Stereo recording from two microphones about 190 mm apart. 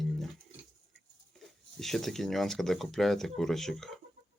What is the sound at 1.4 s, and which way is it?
Speech, centre (ahead or behind).